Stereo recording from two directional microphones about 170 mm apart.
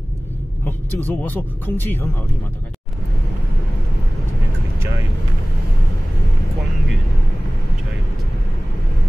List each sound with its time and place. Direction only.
0.7 s speech: 10° left (ahead or behind)